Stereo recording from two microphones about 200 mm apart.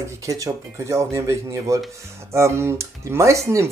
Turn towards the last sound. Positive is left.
turn(degrees=-15)  # may be behind; listen again after turning